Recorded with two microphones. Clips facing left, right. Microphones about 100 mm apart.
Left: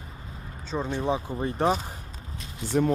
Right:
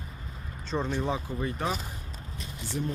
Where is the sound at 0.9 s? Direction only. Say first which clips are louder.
Left 3 dB; 20° left (ahead or behind).